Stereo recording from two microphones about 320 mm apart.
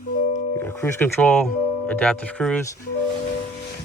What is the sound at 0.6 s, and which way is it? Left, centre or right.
Speech, centre.